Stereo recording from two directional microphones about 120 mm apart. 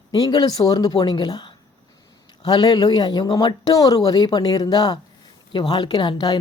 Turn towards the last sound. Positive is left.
turn(degrees=35)  # may be behind; listen again after turning